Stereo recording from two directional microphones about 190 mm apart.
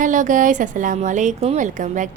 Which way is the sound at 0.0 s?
40° right (ahead or behind).